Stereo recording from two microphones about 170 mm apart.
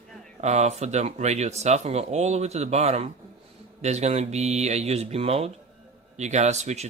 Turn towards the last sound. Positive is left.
turn(degrees=-40)  # may be behind; listen again after turning